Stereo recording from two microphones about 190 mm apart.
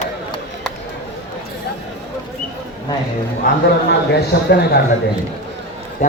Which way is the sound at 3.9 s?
60° left (ahead or behind).